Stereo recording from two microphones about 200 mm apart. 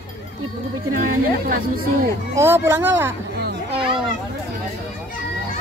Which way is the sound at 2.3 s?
10° right (ahead or behind).